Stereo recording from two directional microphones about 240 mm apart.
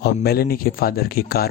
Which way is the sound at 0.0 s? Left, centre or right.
Left.